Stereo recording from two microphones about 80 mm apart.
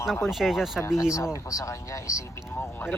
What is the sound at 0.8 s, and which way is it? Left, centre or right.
Speech, left.